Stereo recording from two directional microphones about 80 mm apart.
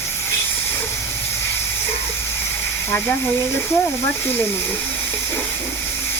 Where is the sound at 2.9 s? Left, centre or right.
Left.